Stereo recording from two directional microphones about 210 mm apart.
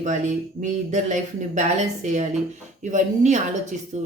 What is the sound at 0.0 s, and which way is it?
Speech, 35° right (ahead or behind).